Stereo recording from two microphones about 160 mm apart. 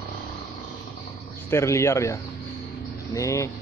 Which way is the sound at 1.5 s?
15° left (ahead or behind).